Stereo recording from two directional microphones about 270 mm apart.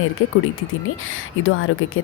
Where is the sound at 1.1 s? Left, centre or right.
Left.